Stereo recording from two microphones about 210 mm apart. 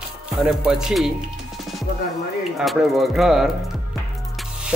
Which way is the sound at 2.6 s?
Centre (ahead or behind).